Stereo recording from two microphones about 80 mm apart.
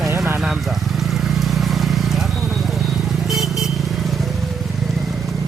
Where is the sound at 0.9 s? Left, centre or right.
Centre.